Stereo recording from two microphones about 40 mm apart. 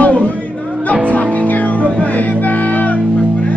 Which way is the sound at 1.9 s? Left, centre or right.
Left.